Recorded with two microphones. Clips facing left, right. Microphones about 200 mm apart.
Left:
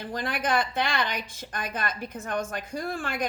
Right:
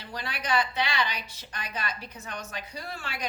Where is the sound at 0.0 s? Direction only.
50° left (ahead or behind).